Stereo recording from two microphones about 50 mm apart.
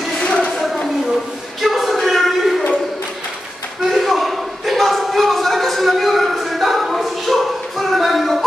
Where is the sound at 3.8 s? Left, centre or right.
Centre.